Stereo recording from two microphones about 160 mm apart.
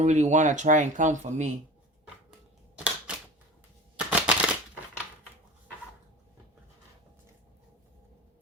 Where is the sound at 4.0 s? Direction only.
5° right (ahead or behind).